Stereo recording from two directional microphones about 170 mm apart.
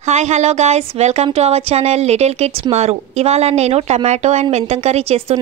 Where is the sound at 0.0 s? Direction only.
40° right (ahead or behind).